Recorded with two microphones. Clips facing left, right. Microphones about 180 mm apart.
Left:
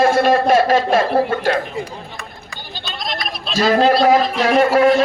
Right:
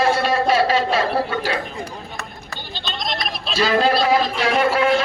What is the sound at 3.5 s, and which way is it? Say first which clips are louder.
A man's voice: left 4 dB; 40° left (ahead or behind).